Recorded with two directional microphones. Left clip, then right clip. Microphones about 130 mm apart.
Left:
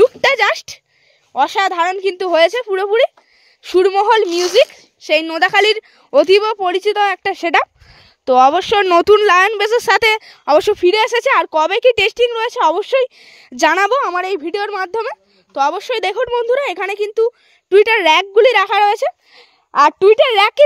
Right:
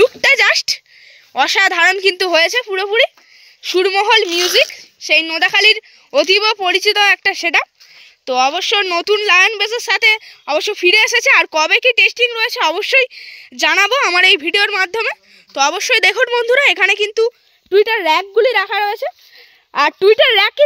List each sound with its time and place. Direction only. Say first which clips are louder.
0.0 s a sound: right 1 dB; 25° left (ahead or behind)
1.3 s a woman's voice: right 2 dB; 15° left (ahead or behind)
2.4 s a woman's voice: left 2 dB; 30° left (ahead or behind)
4.6 s speech: left 2 dB; 35° left (ahead or behind)
8.3 s speech: left 4 dB; 50° left (ahead or behind)
10.8 s a woman's voice: right 2 dB; 25° left (ahead or behind)
11.4 s speech: left 1 dB; 20° left (ahead or behind)
11.7 s a woman's voice: right 3 dB; 40° left (ahead or behind)
13.2 s speech: left 2 dB; 45° left (ahead or behind)
13.9 s a woman's voice: right 3 dB; 5° right (ahead or behind)
14.2 s a woman's voice: right 8 dB; 15° left (ahead or behind)